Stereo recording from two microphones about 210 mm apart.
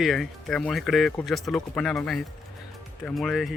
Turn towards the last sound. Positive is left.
turn(degrees=0)  # may be behind; listen again after turning